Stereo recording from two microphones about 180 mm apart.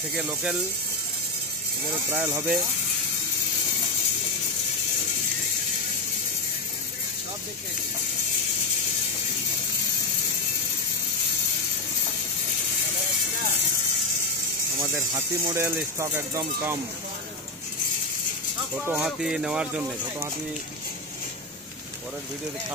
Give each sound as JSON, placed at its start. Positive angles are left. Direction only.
{"t": 0.1, "sound": "speech", "side_deg": -5}
{"t": 2.0, "sound": "speech", "side_deg": -10}
{"t": 14.8, "sound": "speech", "side_deg": -15}
{"t": 18.9, "sound": "speech", "side_deg": 0}